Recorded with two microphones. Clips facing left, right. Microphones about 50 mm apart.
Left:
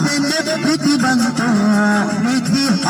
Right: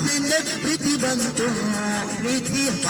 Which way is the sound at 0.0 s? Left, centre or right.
Left.